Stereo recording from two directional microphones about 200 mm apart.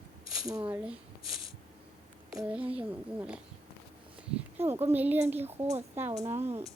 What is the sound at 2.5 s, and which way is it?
Speech, 5° right (ahead or behind).